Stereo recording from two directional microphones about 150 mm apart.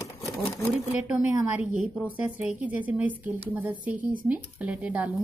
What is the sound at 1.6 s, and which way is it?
Speech, 55° right (ahead or behind).